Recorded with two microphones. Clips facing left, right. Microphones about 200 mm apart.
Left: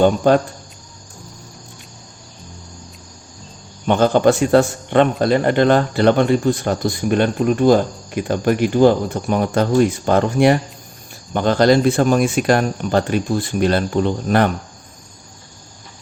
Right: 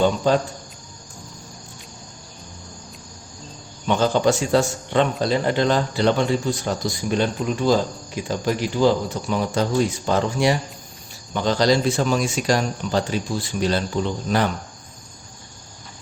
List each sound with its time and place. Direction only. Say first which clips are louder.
0.2 s speech: left 5 dB; 55° left (ahead or behind)
3.8 s speech: left 5 dB; 55° left (ahead or behind)